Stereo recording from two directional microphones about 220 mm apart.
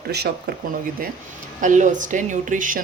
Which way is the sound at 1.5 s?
35° right (ahead or behind).